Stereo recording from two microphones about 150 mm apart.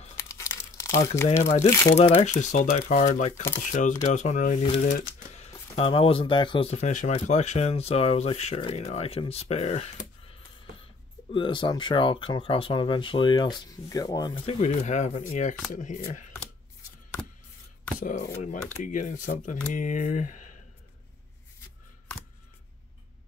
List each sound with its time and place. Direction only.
0.2 s crumpling: 20° left (ahead or behind)
1.0 s speech: 20° left (ahead or behind)
2.0 s speech: 50° left (ahead or behind)
5.8 s speech: 40° left (ahead or behind)
6.7 s speech: 50° left (ahead or behind)
11.3 s speech: 30° left (ahead or behind)
14.4 s speech: 45° left (ahead or behind)
18.4 s speech: 55° left (ahead or behind)